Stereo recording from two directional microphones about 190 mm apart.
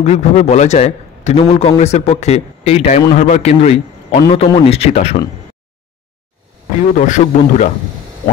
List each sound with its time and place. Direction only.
0.0 s a man's voice: 35° left (ahead or behind)
1.4 s a man's voice: 25° left (ahead or behind)
7.0 s a man's voice: 40° left (ahead or behind)